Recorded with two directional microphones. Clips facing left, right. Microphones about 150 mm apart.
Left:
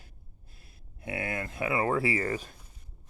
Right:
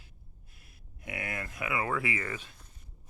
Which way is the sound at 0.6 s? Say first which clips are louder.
Left 5 dB; 30° left (ahead or behind).